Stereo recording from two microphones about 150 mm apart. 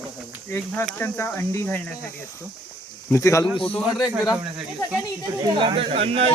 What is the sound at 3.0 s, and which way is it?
Speech, 20° left (ahead or behind).